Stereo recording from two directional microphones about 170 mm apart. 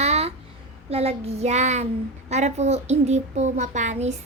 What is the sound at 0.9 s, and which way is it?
A woman's voice, 35° right (ahead or behind).